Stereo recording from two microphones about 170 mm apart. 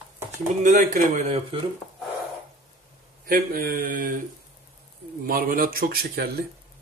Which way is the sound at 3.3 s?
55° right (ahead or behind).